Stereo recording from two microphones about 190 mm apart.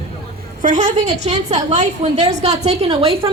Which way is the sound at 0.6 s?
40° right (ahead or behind).